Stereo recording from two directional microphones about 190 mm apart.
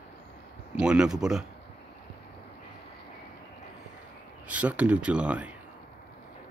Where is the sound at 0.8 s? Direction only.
5° right (ahead or behind).